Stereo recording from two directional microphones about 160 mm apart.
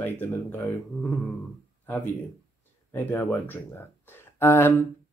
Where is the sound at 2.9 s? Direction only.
10° left (ahead or behind).